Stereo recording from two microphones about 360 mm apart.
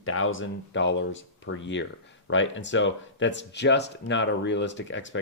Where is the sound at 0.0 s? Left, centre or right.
Left.